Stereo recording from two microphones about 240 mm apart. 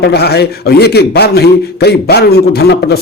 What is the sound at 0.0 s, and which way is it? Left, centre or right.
A man's voice, left.